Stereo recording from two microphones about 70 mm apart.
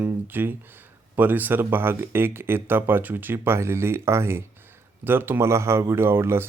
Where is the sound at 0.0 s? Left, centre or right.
Right.